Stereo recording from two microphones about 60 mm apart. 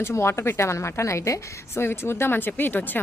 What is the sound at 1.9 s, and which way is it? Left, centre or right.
A woman's voice, left.